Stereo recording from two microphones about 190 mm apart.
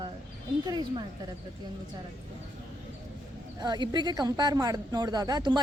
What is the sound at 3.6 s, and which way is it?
Speech, 25° right (ahead or behind).